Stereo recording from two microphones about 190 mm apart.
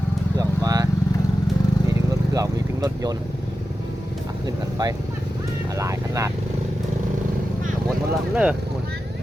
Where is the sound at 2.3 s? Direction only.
20° right (ahead or behind).